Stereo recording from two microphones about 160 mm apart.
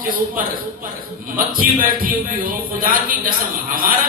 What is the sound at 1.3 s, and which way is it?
Speech, 60° right (ahead or behind).